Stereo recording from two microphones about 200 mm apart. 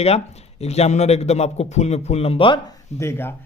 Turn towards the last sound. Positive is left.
turn(degrees=15)  # may be behind; listen again after turning